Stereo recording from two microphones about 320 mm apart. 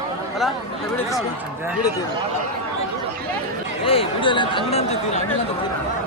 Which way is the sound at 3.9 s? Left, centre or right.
Centre.